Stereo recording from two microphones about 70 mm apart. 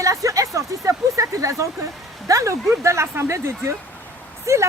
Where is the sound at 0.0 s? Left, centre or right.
Right.